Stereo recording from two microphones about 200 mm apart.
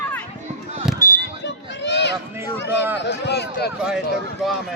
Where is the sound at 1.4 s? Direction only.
60° left (ahead or behind).